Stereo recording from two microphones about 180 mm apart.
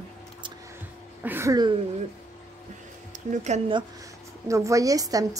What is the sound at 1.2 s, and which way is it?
Speech, 15° right (ahead or behind).